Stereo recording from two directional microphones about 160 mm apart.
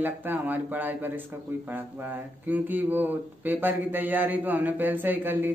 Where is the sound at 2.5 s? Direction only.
10° right (ahead or behind).